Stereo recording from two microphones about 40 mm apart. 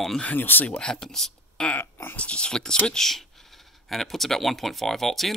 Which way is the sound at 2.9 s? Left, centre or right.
Centre.